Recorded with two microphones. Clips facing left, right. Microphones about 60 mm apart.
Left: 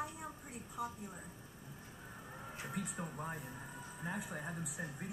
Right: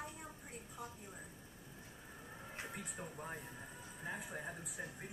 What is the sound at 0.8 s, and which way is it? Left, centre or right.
Speech, left.